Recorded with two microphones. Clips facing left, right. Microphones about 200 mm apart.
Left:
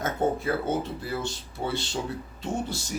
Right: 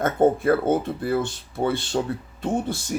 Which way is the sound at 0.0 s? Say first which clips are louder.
Right 7 dB; 55° right (ahead or behind).